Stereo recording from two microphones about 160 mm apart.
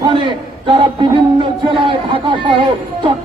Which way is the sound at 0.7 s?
30° right (ahead or behind).